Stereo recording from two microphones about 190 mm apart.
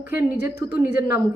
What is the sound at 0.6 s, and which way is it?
Speech, 20° right (ahead or behind).